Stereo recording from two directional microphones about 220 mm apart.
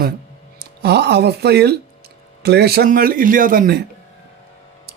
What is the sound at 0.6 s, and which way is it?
Speech, 50° right (ahead or behind).